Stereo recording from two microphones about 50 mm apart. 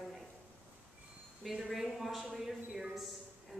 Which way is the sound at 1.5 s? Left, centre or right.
Centre.